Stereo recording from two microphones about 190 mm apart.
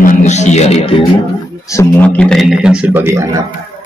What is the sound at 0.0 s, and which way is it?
Speech, 40° left (ahead or behind).